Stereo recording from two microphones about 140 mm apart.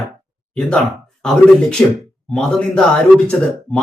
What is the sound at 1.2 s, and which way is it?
Speech, 5° left (ahead or behind).